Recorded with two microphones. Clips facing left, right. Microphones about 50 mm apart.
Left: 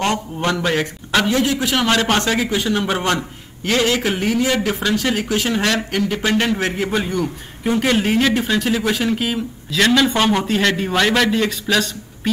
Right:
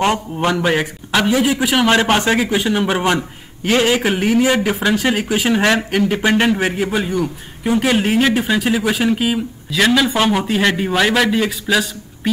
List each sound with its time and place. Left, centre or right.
0.0 s a man's voice: centre
6.5 s a man's voice: centre